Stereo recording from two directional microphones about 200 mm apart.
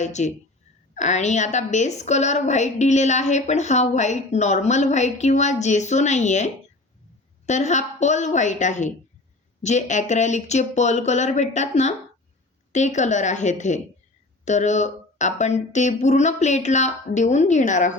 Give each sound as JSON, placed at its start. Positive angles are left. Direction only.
{"t": 0.0, "sound": "a woman's voice", "side_deg": 35}